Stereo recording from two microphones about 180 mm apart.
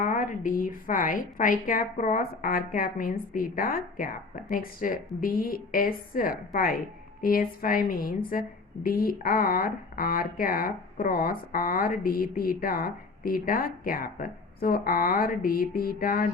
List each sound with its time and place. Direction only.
0.0 s a woman's voice: 45° left (ahead or behind)